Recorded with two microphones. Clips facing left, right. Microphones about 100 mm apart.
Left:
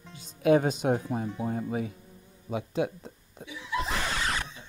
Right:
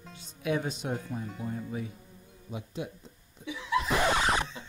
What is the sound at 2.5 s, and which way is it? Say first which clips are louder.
Speech: left 8 dB; 90° left.